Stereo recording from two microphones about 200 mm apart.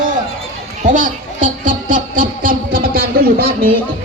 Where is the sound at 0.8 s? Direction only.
40° right (ahead or behind).